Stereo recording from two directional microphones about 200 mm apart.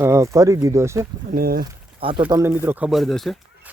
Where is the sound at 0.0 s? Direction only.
15° right (ahead or behind).